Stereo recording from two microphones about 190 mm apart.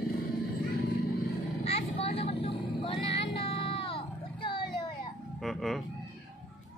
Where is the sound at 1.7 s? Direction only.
30° left (ahead or behind).